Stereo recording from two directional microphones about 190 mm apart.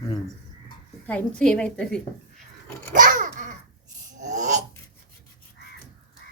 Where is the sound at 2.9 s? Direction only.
45° right (ahead or behind).